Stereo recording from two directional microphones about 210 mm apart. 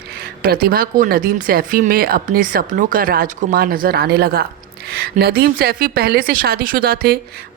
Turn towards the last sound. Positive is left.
turn(degrees=-45)  # may be behind; listen again after turning